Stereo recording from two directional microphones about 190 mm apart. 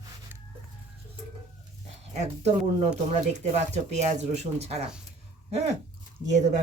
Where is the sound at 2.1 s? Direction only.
35° right (ahead or behind).